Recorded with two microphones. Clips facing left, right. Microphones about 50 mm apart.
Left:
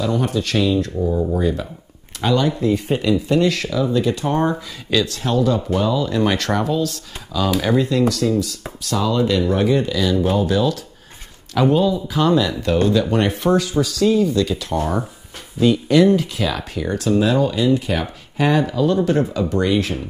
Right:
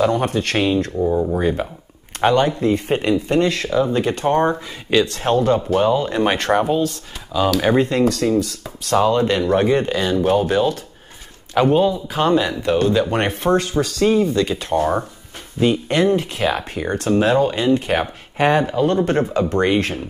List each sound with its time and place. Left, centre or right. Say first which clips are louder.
0.0 s speech: right 3 dB; right
0.9 s speech: right 2 dB; centre
2.1 s speech: right 3 dB; right
7.6 s speech: even; right; by 13.1 s centre
13.1 s speech: left 1 dB; right